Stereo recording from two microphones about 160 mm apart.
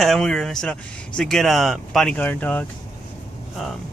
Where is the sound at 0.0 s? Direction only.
Centre (ahead or behind).